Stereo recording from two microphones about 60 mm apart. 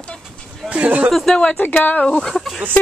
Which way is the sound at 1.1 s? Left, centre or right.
Centre.